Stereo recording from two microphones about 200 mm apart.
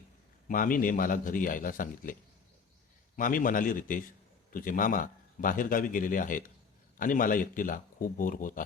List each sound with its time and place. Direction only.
0.4 s speech: 40° left (ahead or behind)
3.2 s speech: 40° left (ahead or behind)